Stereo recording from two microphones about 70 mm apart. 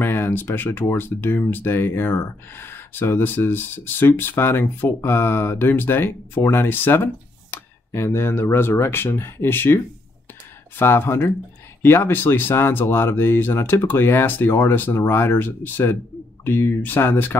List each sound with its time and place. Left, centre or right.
0.0 s speech: left
10.8 s speech: left